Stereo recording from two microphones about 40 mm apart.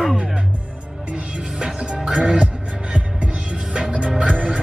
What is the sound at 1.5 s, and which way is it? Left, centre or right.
Music, right.